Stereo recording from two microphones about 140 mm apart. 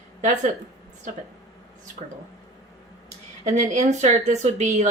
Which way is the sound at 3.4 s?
55° right (ahead or behind).